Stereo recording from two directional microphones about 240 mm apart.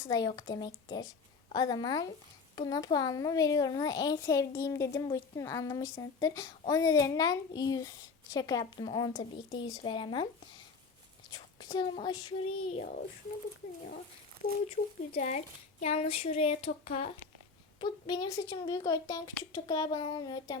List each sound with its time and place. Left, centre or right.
0.1 s a woman's voice: centre
11.3 s a woman's voice: centre
15.1 s a woman's voice: left